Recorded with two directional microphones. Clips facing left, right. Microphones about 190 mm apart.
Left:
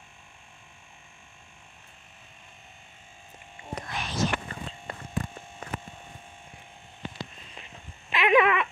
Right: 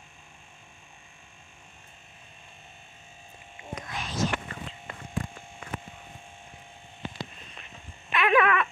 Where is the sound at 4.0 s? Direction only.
75° left (ahead or behind).